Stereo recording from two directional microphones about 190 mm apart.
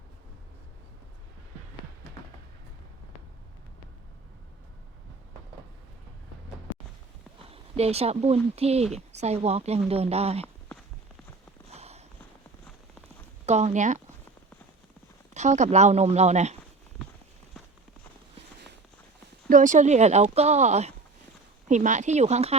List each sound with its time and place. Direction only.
7.5 s speech: 35° right (ahead or behind)
11.7 s walk: 35° right (ahead or behind)
13.4 s speech: 35° right (ahead or behind)
15.3 s speech: 40° right (ahead or behind)
19.5 s speech: 40° right (ahead or behind)